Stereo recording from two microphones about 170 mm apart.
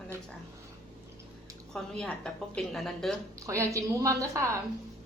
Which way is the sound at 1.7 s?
5° left (ahead or behind).